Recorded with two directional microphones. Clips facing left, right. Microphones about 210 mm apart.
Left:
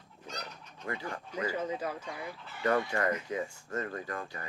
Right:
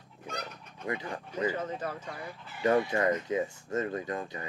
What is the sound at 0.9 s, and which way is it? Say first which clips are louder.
Speech: right 3 dB; 20° right (ahead or behind).